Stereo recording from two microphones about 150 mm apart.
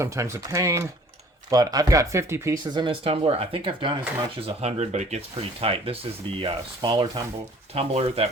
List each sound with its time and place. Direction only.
0.0 s speech: 20° right (ahead or behind); by 8.3 s 40° right (ahead or behind)